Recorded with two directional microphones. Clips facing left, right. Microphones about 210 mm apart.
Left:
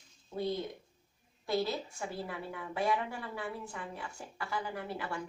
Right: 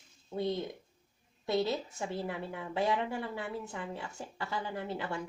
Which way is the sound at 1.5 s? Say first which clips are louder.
Right 2 dB; 25° right (ahead or behind).